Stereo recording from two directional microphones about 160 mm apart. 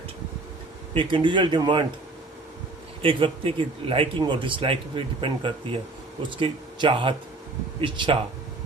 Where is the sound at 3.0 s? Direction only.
35° right (ahead or behind).